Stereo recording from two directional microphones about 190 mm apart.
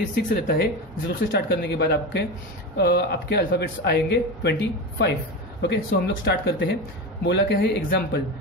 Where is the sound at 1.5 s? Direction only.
60° left (ahead or behind).